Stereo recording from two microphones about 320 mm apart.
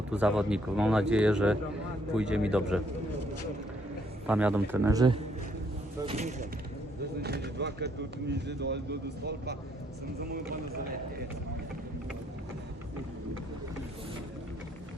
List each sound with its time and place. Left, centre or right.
0.1 s speech: centre
4.3 s speech: centre
6.1 s speech: right